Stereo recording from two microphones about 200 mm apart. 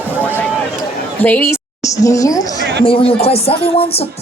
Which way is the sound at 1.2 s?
10° left (ahead or behind).